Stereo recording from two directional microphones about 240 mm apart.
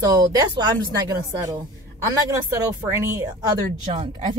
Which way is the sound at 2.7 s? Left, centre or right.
Centre.